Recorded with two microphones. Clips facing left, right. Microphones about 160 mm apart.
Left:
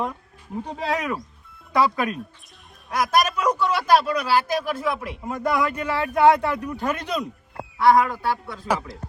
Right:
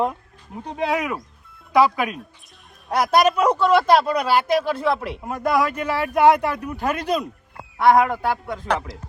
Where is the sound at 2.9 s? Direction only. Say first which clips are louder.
Right 4 dB; 30° right (ahead or behind).